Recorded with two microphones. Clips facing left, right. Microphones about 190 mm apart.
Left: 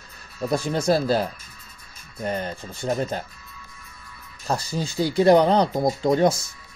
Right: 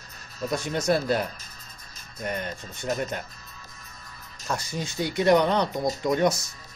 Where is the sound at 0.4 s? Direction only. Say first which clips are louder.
Left 4 dB; 35° left (ahead or behind).